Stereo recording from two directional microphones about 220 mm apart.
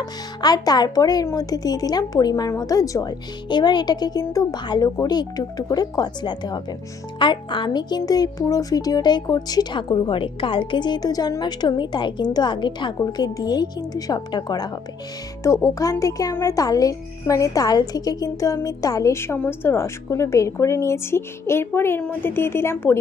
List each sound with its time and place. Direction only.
0.0 s speech: 15° left (ahead or behind)